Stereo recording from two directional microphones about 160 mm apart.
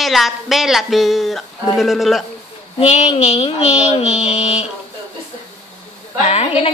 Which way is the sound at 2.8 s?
40° left (ahead or behind).